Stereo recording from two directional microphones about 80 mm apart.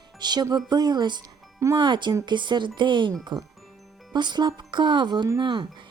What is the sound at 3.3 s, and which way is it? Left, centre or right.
Speech, right.